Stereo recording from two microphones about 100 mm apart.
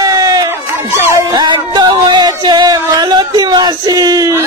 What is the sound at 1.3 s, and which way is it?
Music, 45° right (ahead or behind).